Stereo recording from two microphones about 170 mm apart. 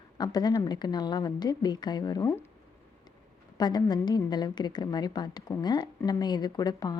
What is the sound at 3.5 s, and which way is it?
A woman's voice, 25° left (ahead or behind).